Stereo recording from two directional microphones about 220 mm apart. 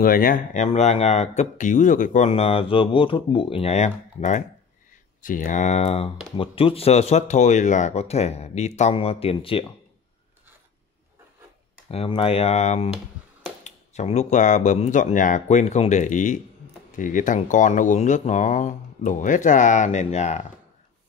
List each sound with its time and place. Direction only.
0.0 s speech: 40° left (ahead or behind); by 9.7 s 25° left (ahead or behind)
11.9 s speech: 25° left (ahead or behind)